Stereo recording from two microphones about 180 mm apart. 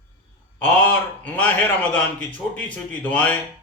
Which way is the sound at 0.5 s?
10° left (ahead or behind).